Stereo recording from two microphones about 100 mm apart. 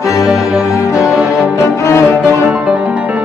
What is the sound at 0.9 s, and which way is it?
Music, 5° right (ahead or behind).